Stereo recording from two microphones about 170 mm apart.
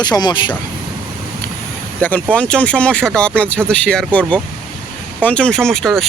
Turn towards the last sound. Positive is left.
turn(degrees=0)  # may be behind; listen again after turning